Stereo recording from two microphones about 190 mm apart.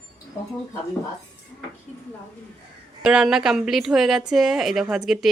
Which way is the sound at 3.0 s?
5° right (ahead or behind).